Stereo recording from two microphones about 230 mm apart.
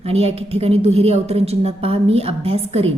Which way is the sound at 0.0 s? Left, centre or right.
Right.